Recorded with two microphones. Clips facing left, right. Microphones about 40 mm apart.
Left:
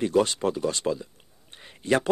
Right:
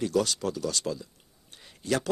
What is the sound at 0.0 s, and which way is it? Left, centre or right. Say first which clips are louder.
Speech: left 4 dB; left.